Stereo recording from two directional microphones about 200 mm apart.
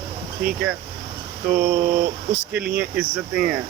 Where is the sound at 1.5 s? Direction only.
45° right (ahead or behind).